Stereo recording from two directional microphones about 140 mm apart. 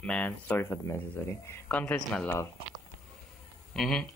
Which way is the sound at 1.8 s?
5° left (ahead or behind).